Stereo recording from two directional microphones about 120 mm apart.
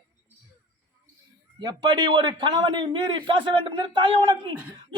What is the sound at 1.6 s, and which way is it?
A man's voice, 35° right (ahead or behind).